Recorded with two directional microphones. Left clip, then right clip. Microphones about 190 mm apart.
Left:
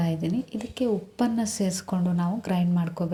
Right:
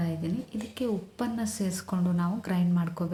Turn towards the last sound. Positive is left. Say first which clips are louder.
# left 3 dB
turn(degrees=15)  # may be behind; listen again after turning